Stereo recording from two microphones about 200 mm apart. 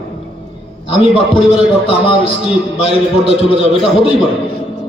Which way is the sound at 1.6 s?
30° left (ahead or behind).